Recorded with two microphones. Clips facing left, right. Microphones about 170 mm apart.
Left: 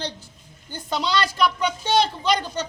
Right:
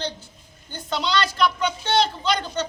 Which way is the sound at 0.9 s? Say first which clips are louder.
Even; 10° left (ahead or behind).